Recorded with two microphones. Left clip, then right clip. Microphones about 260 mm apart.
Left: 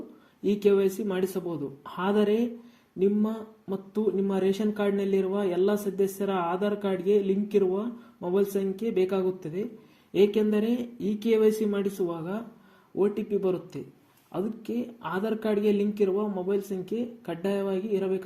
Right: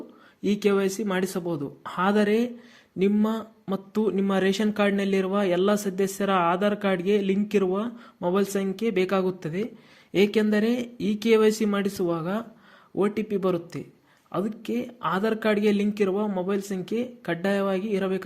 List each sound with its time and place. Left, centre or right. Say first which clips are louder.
0.4 s speech: even; right